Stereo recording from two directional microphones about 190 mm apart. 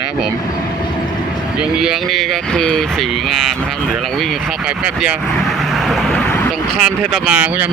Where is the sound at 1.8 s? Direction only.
Centre (ahead or behind).